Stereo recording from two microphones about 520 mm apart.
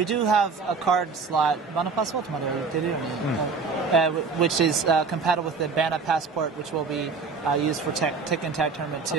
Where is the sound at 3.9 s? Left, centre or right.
Right.